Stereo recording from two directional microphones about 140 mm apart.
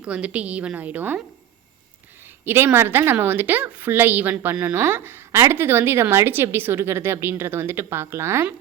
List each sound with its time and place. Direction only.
0.0 s a woman's voice: 10° right (ahead or behind)
2.4 s a woman's voice: 15° right (ahead or behind)